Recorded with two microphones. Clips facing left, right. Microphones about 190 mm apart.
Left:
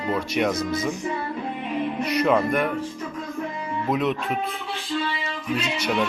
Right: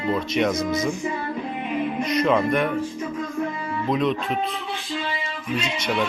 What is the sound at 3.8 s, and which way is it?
Speech, 10° left (ahead or behind).